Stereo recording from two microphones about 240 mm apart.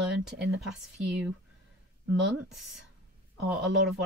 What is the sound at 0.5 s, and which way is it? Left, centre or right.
Speech, centre.